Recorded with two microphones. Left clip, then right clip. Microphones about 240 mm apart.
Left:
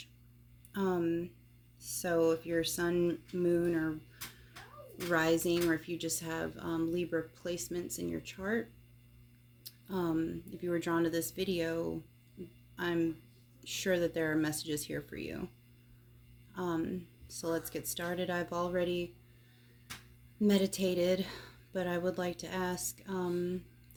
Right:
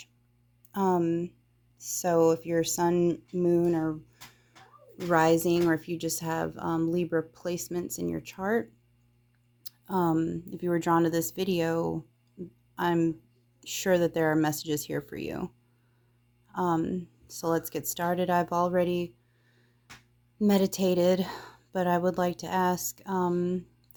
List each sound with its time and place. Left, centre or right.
0.7 s speech: right
5.0 s speech: right
9.6 s speech: right
16.6 s speech: right
20.4 s speech: right